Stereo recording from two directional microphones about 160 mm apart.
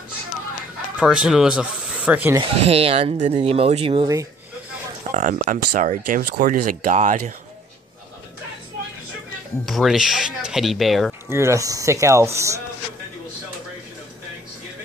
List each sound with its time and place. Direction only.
0.9 s speech: 5° right (ahead or behind)
2.5 s speech: 40° right (ahead or behind)
5.1 s speech: 55° right (ahead or behind)
9.7 s speech: centre (ahead or behind)
11.2 s speech: 15° right (ahead or behind)